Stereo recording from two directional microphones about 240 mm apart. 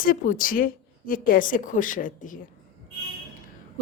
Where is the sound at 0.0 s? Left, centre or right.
Left.